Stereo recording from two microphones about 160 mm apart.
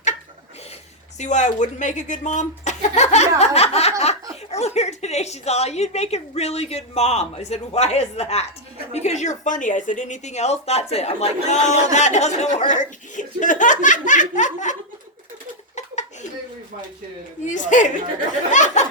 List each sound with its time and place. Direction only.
1.2 s a woman's voice: 50° left (ahead or behind)
17.4 s a woman's voice: 50° left (ahead or behind)